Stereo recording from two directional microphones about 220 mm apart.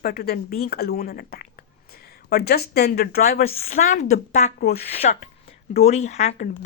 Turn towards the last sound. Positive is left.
turn(degrees=35)  # may be behind; listen again after turning